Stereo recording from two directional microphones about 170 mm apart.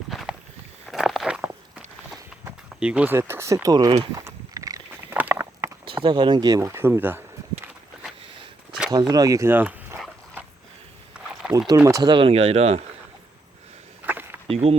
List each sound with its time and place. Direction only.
0.1 s walk: centre (ahead or behind)
2.4 s speech: 10° right (ahead or behind)
4.2 s a sound: 20° right (ahead or behind)
5.8 s a sound: 30° right (ahead or behind); by 7.7 s 10° right (ahead or behind)
8.9 s speech: 25° right (ahead or behind)
11.4 s liquid: 5° right (ahead or behind)
11.8 s speech: 20° right (ahead or behind); by 12.8 s 35° right (ahead or behind)
14.0 s a sound: 10° right (ahead or behind)
14.4 s speech: 35° right (ahead or behind)